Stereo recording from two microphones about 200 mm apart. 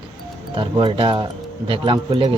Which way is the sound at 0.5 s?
25° right (ahead or behind).